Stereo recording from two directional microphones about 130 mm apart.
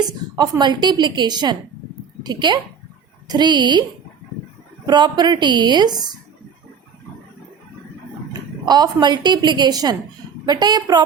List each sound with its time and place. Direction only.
0.3 s a woman's voice: 30° right (ahead or behind)
4.9 s a woman's voice: 35° right (ahead or behind)
8.3 s a woman's voice: 30° right (ahead or behind)